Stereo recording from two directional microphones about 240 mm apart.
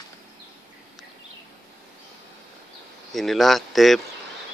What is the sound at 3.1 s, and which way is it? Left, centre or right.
Speech, centre.